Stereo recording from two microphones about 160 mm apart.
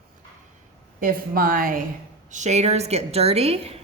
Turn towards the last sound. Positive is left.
turn(degrees=-40)  # may be behind; listen again after turning